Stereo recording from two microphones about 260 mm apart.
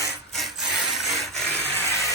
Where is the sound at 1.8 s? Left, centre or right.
Centre.